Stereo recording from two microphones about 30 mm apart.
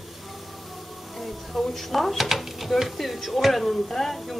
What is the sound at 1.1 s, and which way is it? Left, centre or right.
A woman's voice, centre.